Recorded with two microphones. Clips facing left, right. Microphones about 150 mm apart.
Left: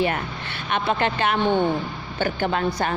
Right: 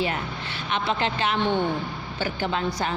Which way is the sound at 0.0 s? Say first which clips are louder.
Left 3 dB; 55° left (ahead or behind).